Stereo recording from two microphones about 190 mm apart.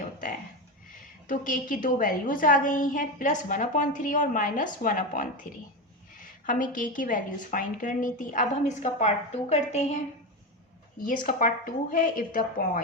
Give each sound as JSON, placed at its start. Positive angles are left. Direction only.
{"t": 1.3, "sound": "a woman's voice", "side_deg": 45}
{"t": 11.0, "sound": "a woman's voice", "side_deg": 45}